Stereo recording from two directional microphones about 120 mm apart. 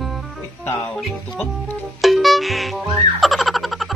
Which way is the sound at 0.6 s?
25° left (ahead or behind).